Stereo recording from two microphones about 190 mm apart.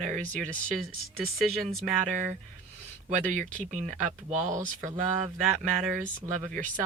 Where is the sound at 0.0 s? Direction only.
40° right (ahead or behind).